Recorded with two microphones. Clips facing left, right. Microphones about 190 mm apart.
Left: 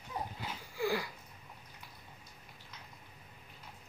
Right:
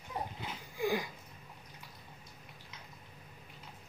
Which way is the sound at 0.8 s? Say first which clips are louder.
Right 1 dB; 20° right (ahead or behind).